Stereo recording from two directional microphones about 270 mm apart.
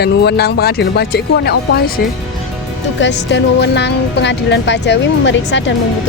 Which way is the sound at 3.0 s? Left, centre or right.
Left.